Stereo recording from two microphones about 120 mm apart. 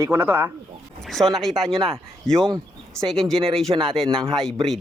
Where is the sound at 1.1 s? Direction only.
Centre (ahead or behind).